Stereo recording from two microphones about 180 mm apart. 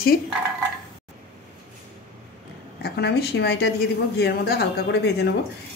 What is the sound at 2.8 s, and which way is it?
A woman's voice, 65° left (ahead or behind).